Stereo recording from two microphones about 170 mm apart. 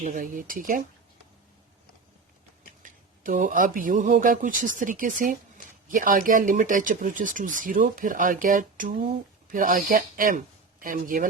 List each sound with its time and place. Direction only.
0.0 s speech: 50° right (ahead or behind)
2.8 s speech: 50° right (ahead or behind)